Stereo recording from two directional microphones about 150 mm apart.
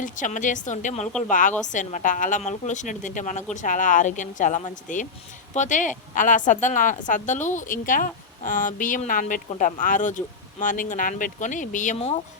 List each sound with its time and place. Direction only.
0.0 s speech: 60° left (ahead or behind)